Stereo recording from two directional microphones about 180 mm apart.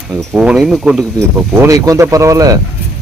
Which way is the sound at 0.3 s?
5° right (ahead or behind).